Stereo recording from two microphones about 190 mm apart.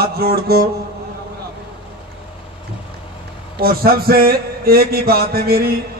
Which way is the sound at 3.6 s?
50° right (ahead or behind).